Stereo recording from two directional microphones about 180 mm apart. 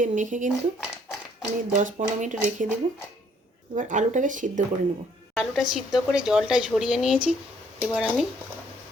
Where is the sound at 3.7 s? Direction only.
40° right (ahead or behind).